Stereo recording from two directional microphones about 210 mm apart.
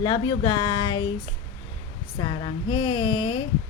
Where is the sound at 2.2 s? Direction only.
25° left (ahead or behind).